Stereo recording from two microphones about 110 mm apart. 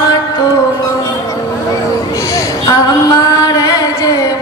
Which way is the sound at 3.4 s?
35° left (ahead or behind).